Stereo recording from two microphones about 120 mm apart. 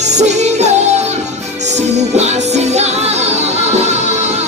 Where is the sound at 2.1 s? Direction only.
70° right (ahead or behind).